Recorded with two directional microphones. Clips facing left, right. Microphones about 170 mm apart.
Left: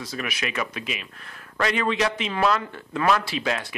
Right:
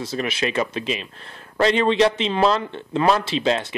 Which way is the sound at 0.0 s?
25° right (ahead or behind).